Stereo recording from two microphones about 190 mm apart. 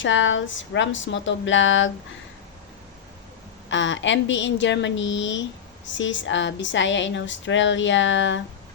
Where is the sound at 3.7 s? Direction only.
75° left (ahead or behind).